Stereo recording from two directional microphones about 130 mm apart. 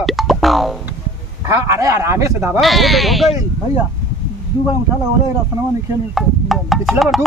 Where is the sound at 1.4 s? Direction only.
20° right (ahead or behind).